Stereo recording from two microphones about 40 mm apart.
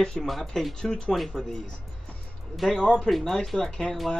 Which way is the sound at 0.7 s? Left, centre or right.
Centre.